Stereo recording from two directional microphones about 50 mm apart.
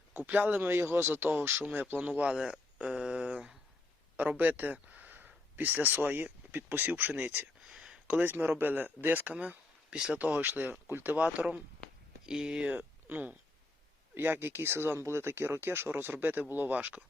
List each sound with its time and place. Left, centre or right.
0.1 s speech: right
0.7 s speech: right
2.5 s a sound: centre
4.2 s speech: right
7.7 s a sound: right
8.2 s speech: right
9.3 s a sound: right
10.1 s speech: right
12.2 s speech: centre
12.7 s speech: right
14.2 s speech: right
16.7 s speech: right